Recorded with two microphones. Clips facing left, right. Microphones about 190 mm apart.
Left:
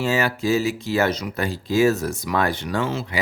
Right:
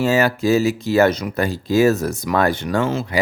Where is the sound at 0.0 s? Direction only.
45° right (ahead or behind).